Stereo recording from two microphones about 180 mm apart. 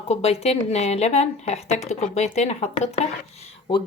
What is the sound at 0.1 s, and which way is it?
A woman's voice, 35° left (ahead or behind).